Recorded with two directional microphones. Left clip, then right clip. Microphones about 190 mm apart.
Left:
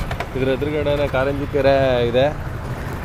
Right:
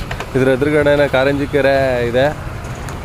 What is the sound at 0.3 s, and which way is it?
Speech, 50° right (ahead or behind).